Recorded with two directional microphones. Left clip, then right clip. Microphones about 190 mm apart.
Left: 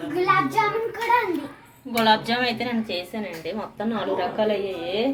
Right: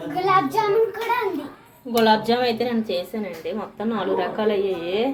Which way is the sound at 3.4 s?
Centre (ahead or behind).